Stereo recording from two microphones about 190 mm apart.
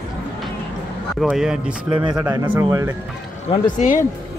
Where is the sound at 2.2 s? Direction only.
15° right (ahead or behind).